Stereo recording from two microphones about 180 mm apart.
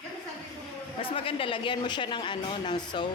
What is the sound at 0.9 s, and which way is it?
A woman's voice, 30° left (ahead or behind).